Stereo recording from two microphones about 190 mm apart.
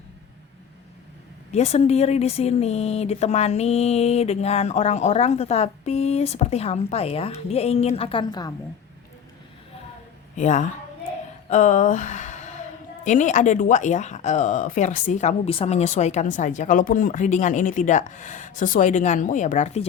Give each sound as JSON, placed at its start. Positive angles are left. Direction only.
{"t": 1.5, "sound": "speech", "side_deg": 35}
{"t": 10.3, "sound": "speech", "side_deg": 40}
{"t": 11.4, "sound": "a sound", "side_deg": 40}
{"t": 13.1, "sound": "speech", "side_deg": 40}